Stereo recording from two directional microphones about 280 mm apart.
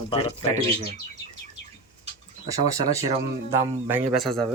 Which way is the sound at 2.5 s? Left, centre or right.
Centre.